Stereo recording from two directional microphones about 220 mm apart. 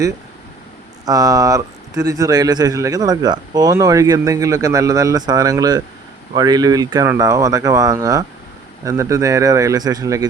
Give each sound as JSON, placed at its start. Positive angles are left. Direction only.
{"t": 1.0, "sound": "speech", "side_deg": -15}